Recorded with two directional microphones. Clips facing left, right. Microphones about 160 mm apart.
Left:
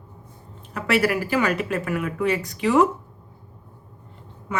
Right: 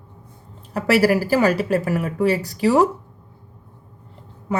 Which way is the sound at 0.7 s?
35° right (ahead or behind).